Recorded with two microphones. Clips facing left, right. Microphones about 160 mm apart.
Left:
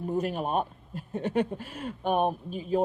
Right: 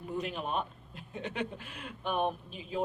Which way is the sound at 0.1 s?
45° left (ahead or behind).